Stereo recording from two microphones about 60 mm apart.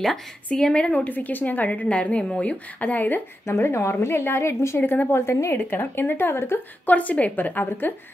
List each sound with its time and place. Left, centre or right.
0.6 s a woman's voice: centre
0.9 s a woman's voice: left
3.4 s a woman's voice: left
5.1 s a woman's voice: left
5.6 s speech: left
6.9 s a woman's voice: left